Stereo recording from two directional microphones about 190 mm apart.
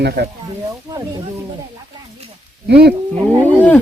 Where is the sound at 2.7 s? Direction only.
60° right (ahead or behind).